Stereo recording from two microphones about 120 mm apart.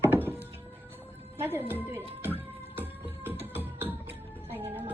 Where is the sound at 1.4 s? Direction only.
15° right (ahead or behind).